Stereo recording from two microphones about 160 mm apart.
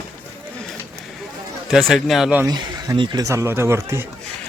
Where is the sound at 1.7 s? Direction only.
Centre (ahead or behind).